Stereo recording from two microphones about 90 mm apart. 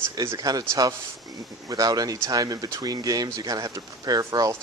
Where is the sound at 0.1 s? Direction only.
40° right (ahead or behind).